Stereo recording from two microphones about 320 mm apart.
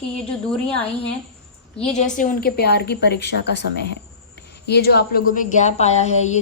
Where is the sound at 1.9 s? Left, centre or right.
Left.